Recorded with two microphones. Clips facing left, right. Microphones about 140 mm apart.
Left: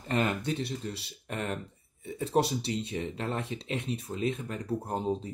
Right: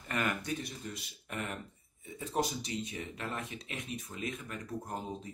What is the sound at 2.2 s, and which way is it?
Speech, 70° left (ahead or behind).